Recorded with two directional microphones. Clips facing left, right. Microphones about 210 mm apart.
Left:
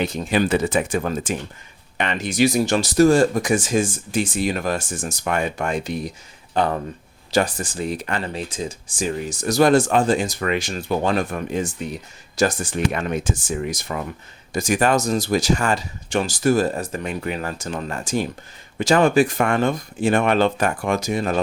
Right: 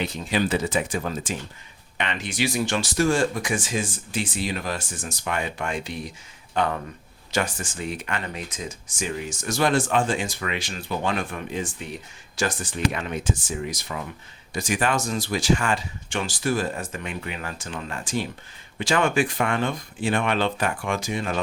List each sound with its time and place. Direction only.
0.0 s speech: 50° left (ahead or behind)
2.0 s speech: 40° left (ahead or behind)